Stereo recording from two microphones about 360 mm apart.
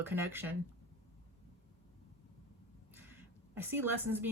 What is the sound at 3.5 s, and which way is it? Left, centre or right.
Speech, centre.